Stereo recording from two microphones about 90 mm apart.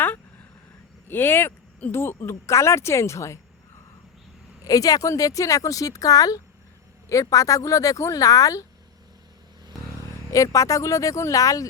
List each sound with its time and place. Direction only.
1.0 s speech: 25° left (ahead or behind)
4.6 s speech: 40° left (ahead or behind)
10.3 s speech: 35° left (ahead or behind)